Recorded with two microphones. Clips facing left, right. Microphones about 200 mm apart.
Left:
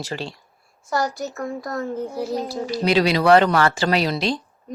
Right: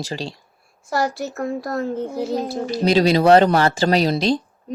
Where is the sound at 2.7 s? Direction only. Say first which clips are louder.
Right 3 dB; 40° right (ahead or behind).